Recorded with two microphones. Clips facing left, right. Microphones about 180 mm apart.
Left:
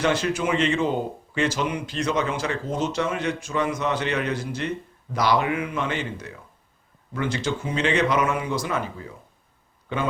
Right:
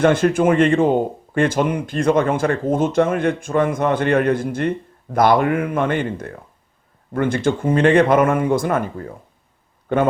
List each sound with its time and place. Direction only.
0.0 s a man's voice: 50° right (ahead or behind)